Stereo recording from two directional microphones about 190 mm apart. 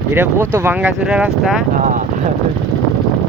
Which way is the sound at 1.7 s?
45° right (ahead or behind).